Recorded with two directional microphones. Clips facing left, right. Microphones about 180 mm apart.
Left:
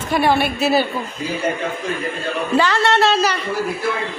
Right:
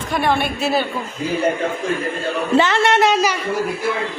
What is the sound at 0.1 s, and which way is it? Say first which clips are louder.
Speech: left 2 dB; 5° left (ahead or behind).